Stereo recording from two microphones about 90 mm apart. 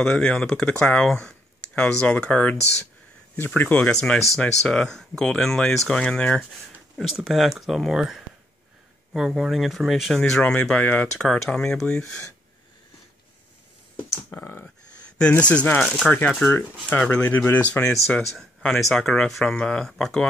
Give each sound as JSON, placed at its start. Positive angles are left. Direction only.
{"t": 0.1, "sound": "speech", "side_deg": 10}
{"t": 7.2, "sound": "speech", "side_deg": -5}
{"t": 10.4, "sound": "speech", "side_deg": 15}
{"t": 14.3, "sound": "speech", "side_deg": 25}
{"t": 14.6, "sound": "speech", "side_deg": 15}